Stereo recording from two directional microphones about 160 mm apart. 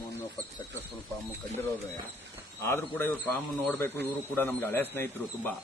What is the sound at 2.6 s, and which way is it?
A man's voice, 15° left (ahead or behind).